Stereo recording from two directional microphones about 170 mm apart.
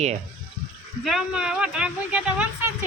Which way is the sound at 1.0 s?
Centre (ahead or behind).